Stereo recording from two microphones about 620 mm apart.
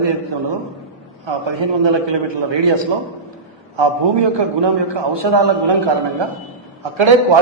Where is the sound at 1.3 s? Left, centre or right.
Right.